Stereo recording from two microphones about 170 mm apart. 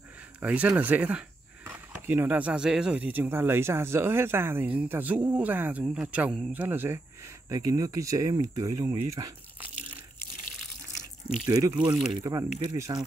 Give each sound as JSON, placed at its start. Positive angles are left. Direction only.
{"t": 0.4, "sound": "speech", "side_deg": -10}
{"t": 11.2, "sound": "speech", "side_deg": -20}
{"t": 11.9, "sound": "speech", "side_deg": 0}
{"t": 12.2, "sound": "speech", "side_deg": -20}